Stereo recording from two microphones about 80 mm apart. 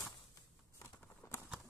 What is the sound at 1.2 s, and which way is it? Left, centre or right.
Clip-clop, left.